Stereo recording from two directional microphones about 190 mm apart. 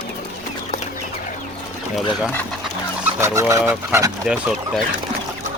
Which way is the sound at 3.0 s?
15° right (ahead or behind).